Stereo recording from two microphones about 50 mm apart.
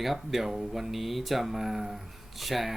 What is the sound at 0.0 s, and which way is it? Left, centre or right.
Speech, centre.